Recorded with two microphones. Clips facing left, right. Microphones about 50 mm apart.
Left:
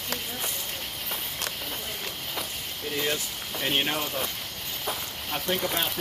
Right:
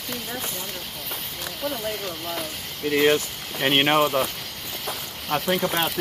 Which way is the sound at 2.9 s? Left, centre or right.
Right.